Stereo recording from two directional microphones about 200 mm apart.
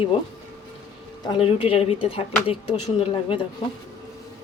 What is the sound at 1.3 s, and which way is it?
Speech, 25° left (ahead or behind).